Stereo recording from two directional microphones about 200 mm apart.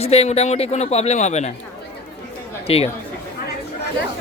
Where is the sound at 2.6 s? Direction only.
30° left (ahead or behind).